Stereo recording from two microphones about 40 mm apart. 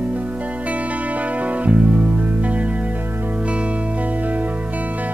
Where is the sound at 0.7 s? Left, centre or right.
Right.